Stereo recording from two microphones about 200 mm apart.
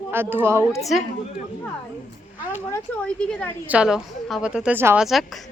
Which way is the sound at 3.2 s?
5° left (ahead or behind).